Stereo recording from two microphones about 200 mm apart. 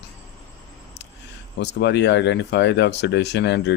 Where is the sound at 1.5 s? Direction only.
60° left (ahead or behind).